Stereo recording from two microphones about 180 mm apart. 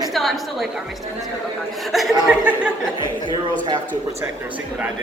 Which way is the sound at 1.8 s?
Centre (ahead or behind).